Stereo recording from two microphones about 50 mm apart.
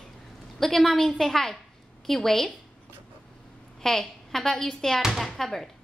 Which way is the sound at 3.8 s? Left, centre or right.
Centre.